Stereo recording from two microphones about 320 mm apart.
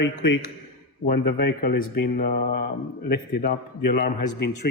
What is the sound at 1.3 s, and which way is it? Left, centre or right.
A man's voice, left.